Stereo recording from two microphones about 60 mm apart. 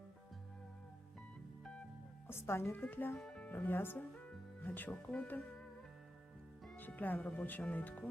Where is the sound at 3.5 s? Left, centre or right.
Left.